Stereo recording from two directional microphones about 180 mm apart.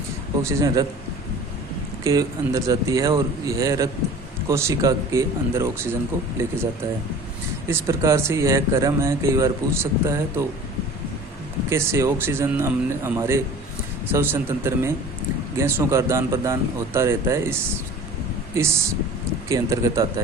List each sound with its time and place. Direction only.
0.4 s a man's voice: 20° right (ahead or behind)
2.0 s speech: 20° right (ahead or behind)
7.7 s speech: 15° right (ahead or behind)
11.7 s speech: 15° right (ahead or behind)
18.5 s speech: 15° right (ahead or behind)